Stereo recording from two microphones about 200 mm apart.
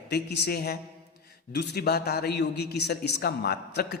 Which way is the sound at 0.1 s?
55° left (ahead or behind).